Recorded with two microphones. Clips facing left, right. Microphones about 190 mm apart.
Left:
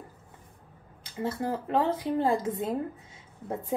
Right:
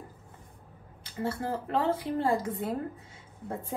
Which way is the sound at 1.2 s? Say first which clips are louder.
Left 1 dB; 15° left (ahead or behind).